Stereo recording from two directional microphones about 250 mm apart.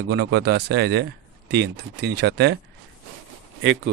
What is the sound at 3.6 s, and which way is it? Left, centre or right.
Speech, right.